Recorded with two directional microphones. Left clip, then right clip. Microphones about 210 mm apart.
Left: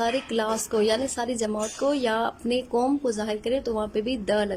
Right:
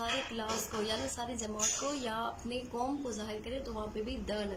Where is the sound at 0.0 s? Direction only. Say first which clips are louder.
Left 11 dB; 45° left (ahead or behind).